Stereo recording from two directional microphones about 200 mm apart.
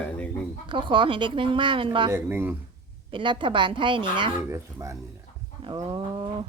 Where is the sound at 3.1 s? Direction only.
25° right (ahead or behind).